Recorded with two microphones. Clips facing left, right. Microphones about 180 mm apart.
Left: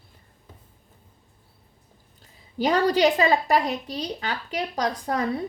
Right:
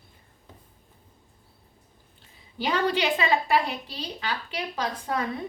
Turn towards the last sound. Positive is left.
turn(degrees=35)  # may be behind; listen again after turning